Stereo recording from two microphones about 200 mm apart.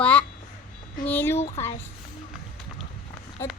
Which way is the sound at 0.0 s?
5° left (ahead or behind).